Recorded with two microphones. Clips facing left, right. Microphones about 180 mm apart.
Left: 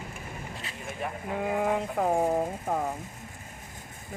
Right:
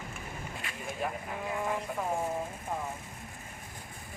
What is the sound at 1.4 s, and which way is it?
Speech, 65° left (ahead or behind).